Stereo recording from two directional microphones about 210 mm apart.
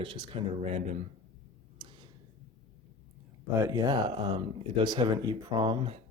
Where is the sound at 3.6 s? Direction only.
15° right (ahead or behind).